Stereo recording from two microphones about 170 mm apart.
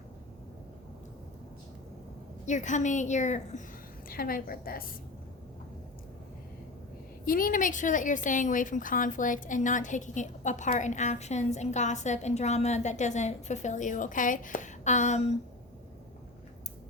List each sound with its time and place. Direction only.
2.5 s a woman's voice: 45° left (ahead or behind)
4.1 s a woman's voice: 60° left (ahead or behind)
7.3 s a woman's voice: 55° left (ahead or behind)